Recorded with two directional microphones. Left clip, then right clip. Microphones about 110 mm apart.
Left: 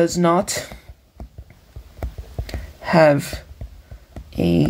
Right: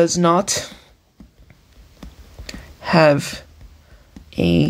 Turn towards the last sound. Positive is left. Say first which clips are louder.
# right 1 dB
turn(degrees=-30)  # may be behind; listen again after turning